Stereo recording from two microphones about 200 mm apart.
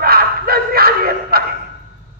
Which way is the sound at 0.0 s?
50° right (ahead or behind).